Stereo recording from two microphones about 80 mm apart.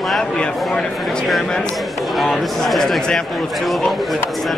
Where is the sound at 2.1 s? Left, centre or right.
Centre.